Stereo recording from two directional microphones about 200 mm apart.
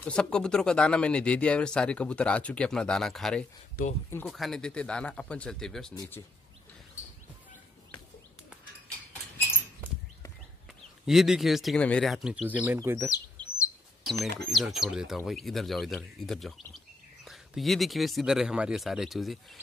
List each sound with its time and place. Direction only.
0.0 s speech: 5° left (ahead or behind)
3.8 s speech: 45° left (ahead or behind)
4.3 s speech: centre (ahead or behind)
11.1 s speech: centre (ahead or behind)
13.4 s chirp: 5° left (ahead or behind)
14.4 s speech: centre (ahead or behind)